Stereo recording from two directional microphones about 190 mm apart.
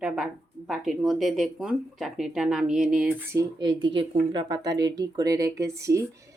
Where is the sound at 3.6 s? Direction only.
25° right (ahead or behind).